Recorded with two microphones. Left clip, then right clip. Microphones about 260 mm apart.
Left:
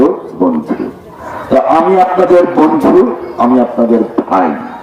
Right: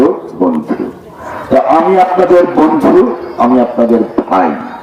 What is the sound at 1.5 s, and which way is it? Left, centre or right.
A man's voice, right.